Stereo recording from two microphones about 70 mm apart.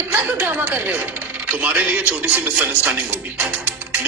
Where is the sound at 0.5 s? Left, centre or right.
Right.